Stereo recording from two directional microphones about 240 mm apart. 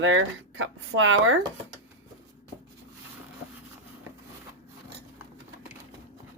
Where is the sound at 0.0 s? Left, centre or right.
Right.